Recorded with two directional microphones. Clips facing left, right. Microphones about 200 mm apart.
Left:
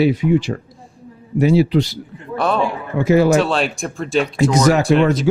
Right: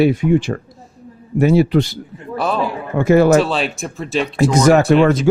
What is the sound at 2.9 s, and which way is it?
Speech, 50° right (ahead or behind).